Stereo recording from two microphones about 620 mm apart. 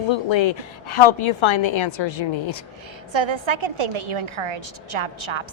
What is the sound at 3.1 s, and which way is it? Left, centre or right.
A woman's voice, right.